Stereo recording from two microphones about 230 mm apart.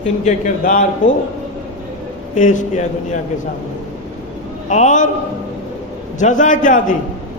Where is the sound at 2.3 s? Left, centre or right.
Left.